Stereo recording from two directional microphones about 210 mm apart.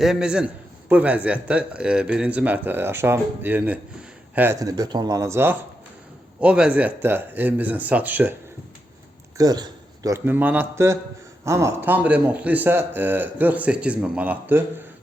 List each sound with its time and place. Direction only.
0.0 s a man's voice: 5° right (ahead or behind)
9.4 s a man's voice: 20° right (ahead or behind)